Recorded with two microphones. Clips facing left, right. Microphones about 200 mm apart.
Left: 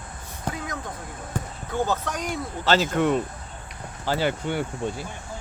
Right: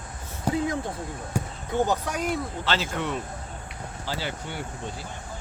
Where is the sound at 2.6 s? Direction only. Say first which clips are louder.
Left 7 dB; 45° left (ahead or behind).